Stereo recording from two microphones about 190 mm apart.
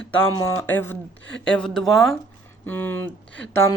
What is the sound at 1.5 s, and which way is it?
Music, 5° left (ahead or behind).